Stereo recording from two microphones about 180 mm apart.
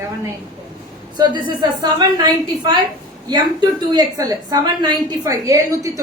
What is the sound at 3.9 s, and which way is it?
A woman's voice, 20° right (ahead or behind).